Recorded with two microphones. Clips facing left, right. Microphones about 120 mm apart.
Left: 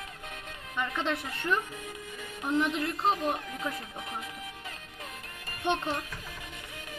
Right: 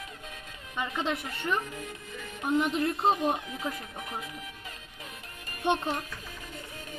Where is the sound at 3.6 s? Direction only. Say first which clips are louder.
Even; 25° right (ahead or behind).